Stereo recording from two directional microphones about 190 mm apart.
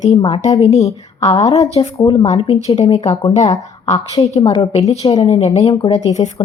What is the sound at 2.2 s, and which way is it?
A woman's voice, 30° left (ahead or behind).